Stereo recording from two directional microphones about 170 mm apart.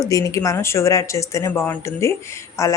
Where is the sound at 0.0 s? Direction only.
20° left (ahead or behind).